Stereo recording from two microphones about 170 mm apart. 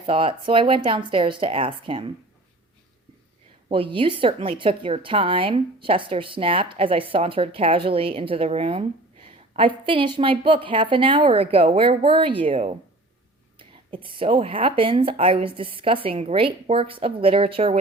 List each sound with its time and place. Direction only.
0.0 s a woman's voice: 30° right (ahead or behind)
3.7 s a woman's voice: 30° right (ahead or behind)